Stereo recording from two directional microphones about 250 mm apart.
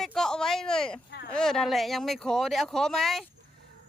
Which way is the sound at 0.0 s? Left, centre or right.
Centre.